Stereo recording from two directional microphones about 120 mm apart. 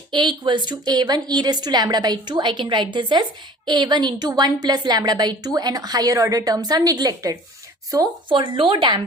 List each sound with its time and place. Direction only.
0.1 s a woman's voice: 40° right (ahead or behind)
8.3 s speech: 45° right (ahead or behind)